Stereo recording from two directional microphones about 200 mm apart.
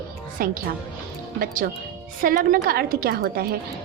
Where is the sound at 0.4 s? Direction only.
45° right (ahead or behind).